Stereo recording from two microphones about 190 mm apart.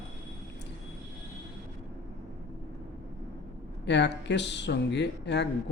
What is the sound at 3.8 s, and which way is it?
Speech, 65° left (ahead or behind).